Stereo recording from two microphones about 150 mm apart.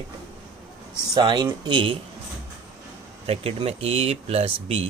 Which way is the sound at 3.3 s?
40° right (ahead or behind).